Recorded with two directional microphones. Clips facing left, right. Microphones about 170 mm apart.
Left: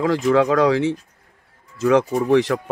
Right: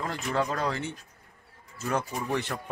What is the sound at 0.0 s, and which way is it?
Speech, 90° left.